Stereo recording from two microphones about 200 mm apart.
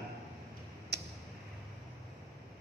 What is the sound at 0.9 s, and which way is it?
Tick-tock, 55° right (ahead or behind).